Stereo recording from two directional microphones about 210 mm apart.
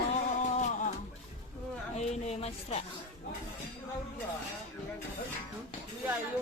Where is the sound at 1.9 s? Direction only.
30° left (ahead or behind).